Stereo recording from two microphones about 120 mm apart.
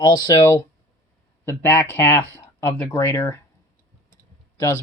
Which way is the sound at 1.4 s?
20° left (ahead or behind).